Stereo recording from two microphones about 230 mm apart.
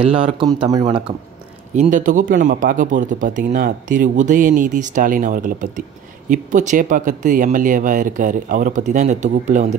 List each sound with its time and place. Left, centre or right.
0.0 s a man's voice: right
1.8 s speech: right